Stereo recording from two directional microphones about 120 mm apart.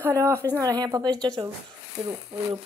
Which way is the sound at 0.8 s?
35° right (ahead or behind).